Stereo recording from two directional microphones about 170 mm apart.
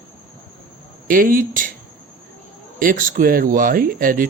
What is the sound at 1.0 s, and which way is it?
Speech, 55° right (ahead or behind).